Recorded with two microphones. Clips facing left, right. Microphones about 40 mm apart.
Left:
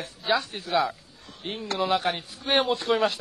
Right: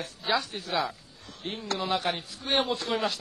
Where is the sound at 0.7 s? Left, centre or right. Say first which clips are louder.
Left 5 dB; centre.